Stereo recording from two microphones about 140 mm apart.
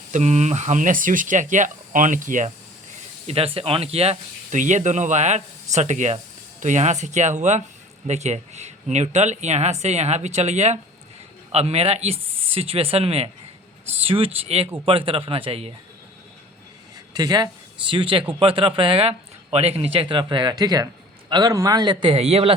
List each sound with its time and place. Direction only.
0.1 s speech: 55° right (ahead or behind)
2.9 s speech: 45° right (ahead or behind)
17.2 s speech: 30° right (ahead or behind); by 22.5 s 45° right (ahead or behind)